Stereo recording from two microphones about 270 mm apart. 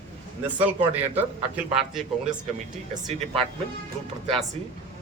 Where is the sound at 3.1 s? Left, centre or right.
Right.